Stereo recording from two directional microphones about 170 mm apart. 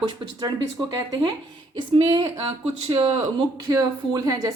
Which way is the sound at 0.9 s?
20° right (ahead or behind).